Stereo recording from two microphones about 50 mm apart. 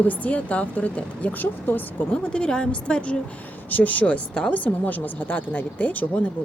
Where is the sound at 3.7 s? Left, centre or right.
Left.